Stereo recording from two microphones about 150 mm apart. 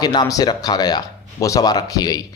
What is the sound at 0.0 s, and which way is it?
Speech, 25° left (ahead or behind).